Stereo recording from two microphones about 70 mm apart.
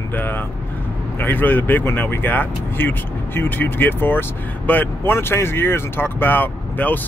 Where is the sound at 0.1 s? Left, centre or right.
Left.